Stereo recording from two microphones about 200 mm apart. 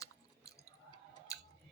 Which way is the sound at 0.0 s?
15° left (ahead or behind).